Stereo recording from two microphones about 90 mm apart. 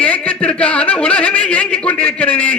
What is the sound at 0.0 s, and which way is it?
Speech, 15° left (ahead or behind).